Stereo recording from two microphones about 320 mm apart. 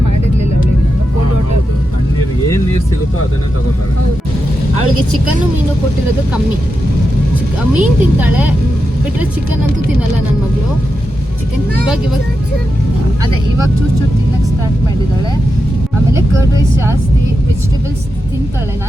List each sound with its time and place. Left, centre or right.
7.8 s a woman's voice: centre
16.1 s speech: centre